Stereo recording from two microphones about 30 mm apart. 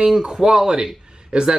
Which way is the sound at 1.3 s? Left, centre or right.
Right.